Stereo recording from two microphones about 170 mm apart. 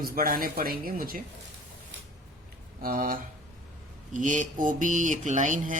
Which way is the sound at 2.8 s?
55° right (ahead or behind).